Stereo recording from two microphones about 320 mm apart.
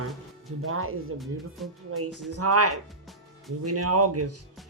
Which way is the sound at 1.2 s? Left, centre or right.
Centre.